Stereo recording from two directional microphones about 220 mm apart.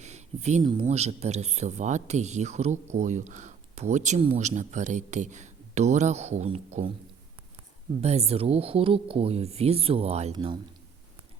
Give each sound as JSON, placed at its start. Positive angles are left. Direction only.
{"t": 0.0, "sound": "a sound", "side_deg": -30}
{"t": 0.6, "sound": "speech", "side_deg": -20}
{"t": 8.0, "sound": "speech", "side_deg": -30}